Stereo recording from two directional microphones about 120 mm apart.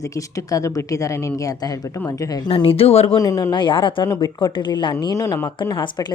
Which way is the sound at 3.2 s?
30° left (ahead or behind).